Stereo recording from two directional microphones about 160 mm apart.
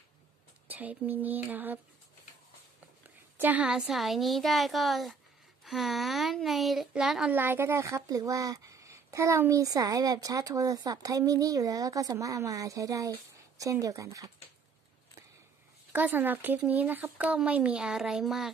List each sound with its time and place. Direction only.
0.7 s speech: 10° right (ahead or behind)
3.3 s a woman's voice: 10° right (ahead or behind)
15.9 s speech: 10° right (ahead or behind)